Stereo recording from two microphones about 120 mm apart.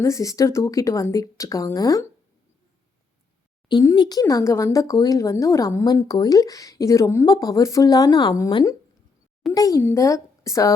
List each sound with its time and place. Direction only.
0.0 s a woman's voice: 25° left (ahead or behind)
3.9 s a woman's voice: 35° left (ahead or behind)